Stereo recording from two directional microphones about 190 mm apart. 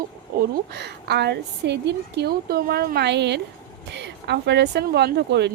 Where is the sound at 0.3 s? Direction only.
60° right (ahead or behind).